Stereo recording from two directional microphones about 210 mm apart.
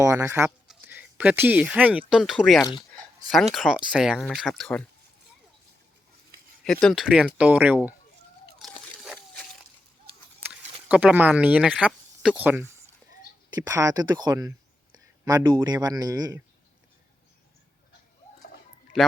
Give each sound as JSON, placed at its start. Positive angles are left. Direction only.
{"t": 0.0, "sound": "speech", "side_deg": -15}
{"t": 6.7, "sound": "speech", "side_deg": 5}
{"t": 9.0, "sound": "a sound", "side_deg": 0}
{"t": 10.8, "sound": "speech", "side_deg": -5}